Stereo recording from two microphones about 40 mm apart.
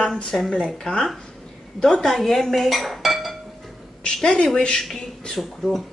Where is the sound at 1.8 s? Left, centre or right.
Centre.